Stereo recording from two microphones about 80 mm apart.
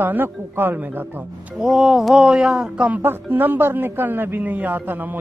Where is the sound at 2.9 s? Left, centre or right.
Right.